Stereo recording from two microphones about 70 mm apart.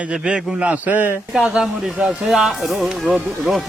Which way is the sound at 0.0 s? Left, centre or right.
Centre.